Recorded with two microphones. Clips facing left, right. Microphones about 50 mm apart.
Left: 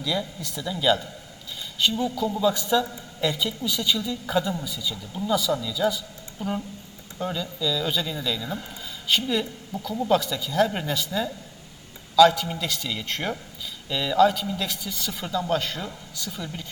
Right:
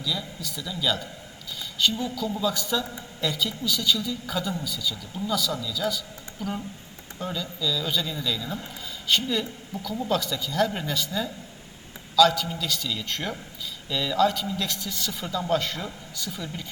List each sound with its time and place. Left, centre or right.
0.0 s a man's voice: left
2.0 s a woman's voice: centre